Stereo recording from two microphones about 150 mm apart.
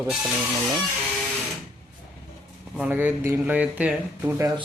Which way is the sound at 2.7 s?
10° right (ahead or behind).